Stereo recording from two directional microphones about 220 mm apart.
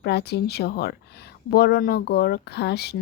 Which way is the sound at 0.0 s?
50° left (ahead or behind).